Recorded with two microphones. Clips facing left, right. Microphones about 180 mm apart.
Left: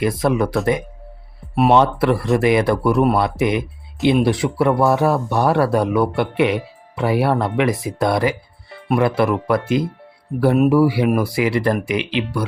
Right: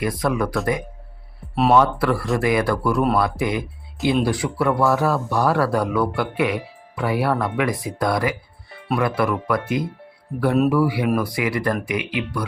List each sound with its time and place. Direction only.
0.0 s speech: 25° left (ahead or behind)